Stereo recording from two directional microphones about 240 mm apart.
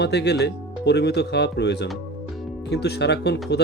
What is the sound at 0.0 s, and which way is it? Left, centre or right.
Speech, left.